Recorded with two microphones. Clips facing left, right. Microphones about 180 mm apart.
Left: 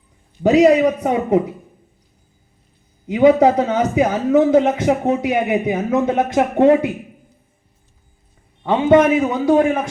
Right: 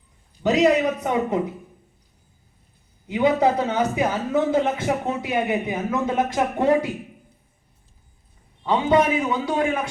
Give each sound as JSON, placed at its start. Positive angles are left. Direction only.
{"t": 0.4, "sound": "a man's voice", "side_deg": 60}
{"t": 3.1, "sound": "a man's voice", "side_deg": 65}
{"t": 4.6, "sound": "speech", "side_deg": 55}
{"t": 8.6, "sound": "speech", "side_deg": 50}